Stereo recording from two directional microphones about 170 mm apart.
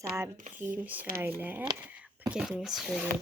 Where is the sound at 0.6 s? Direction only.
10° right (ahead or behind).